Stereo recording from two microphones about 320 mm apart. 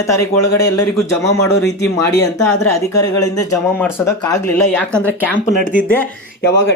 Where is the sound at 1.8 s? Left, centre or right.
Centre.